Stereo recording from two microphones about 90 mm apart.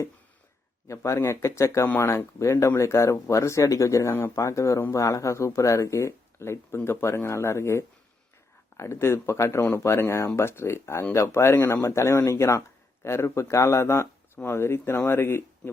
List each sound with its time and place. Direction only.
0.9 s speech: 30° left (ahead or behind)